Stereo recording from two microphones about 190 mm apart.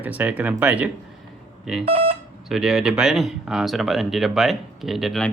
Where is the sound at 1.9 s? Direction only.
30° right (ahead or behind).